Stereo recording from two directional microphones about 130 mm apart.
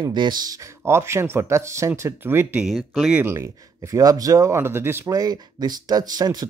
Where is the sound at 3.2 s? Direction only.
20° right (ahead or behind).